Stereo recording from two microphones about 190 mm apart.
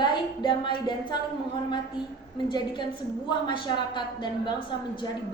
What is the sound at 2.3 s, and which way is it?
A woman's voice, 25° left (ahead or behind).